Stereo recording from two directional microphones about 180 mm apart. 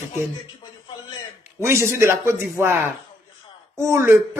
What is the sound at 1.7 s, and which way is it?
Speech, 15° right (ahead or behind).